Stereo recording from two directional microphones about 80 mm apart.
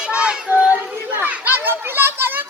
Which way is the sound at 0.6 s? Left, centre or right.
Centre.